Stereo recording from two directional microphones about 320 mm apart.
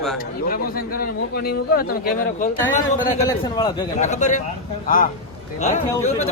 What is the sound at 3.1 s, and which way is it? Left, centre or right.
A man's voice, centre.